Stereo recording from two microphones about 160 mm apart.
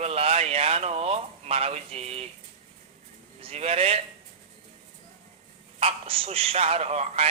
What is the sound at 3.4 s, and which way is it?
Speech, 40° right (ahead or behind).